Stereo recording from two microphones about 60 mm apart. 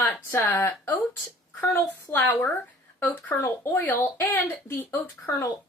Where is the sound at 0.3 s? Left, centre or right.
Left.